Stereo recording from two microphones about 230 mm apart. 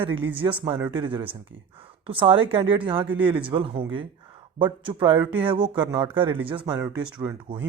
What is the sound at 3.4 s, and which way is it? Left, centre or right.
Speech, right.